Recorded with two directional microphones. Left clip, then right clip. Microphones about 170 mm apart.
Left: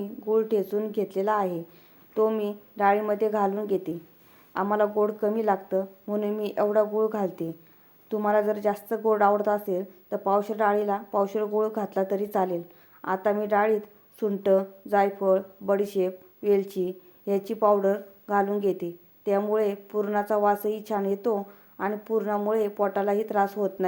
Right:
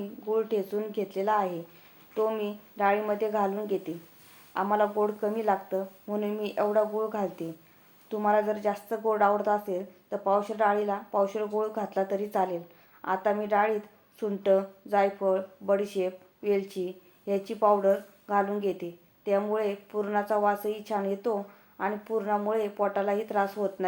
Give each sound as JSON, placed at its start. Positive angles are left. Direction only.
{"t": 0.0, "sound": "speech", "side_deg": 40}